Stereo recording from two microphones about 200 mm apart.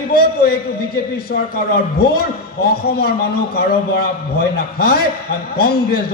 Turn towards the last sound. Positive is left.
turn(degrees=50)  # may be behind; listen again after turning